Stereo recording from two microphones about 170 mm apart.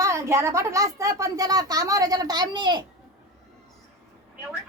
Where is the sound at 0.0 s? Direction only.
15° right (ahead or behind).